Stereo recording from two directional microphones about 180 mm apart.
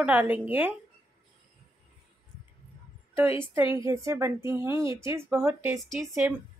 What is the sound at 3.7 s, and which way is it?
Speech, 15° right (ahead or behind).